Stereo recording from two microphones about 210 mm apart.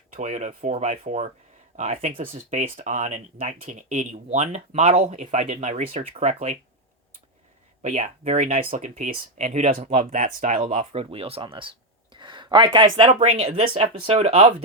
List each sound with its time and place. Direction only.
0.1 s speech: 35° right (ahead or behind)
7.8 s speech: 35° right (ahead or behind)